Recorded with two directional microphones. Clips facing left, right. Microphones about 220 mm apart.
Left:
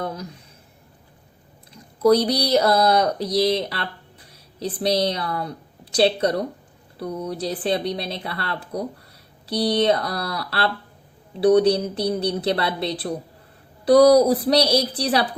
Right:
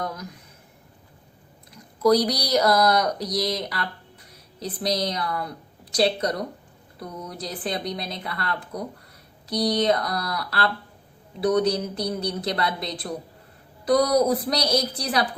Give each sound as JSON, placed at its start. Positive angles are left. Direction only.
{"t": 0.0, "sound": "speech", "side_deg": 30}
{"t": 2.0, "sound": "a woman's voice", "side_deg": 30}